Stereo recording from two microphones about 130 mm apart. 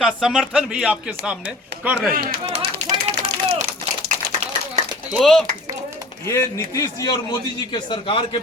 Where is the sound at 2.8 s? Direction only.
60° right (ahead or behind).